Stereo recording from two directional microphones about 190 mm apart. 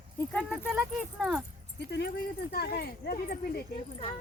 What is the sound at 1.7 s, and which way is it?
Speech, 60° left (ahead or behind).